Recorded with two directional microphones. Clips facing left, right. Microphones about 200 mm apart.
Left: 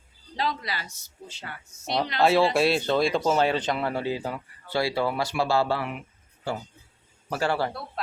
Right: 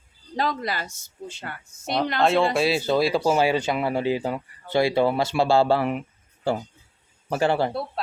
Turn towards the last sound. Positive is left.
turn(degrees=-20)  # may be behind; listen again after turning